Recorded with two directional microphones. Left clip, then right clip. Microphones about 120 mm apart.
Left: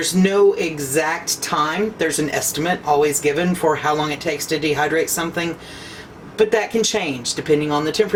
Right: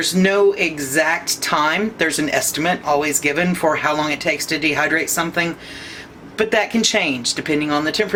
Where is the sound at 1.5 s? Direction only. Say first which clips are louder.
Right 2 dB; 30° right (ahead or behind).